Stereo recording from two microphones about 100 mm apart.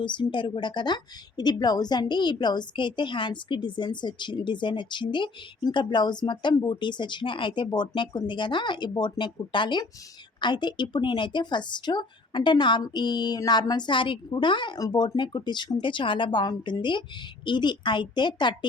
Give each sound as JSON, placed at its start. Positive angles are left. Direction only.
{"t": 0.0, "sound": "a woman's voice", "side_deg": 55}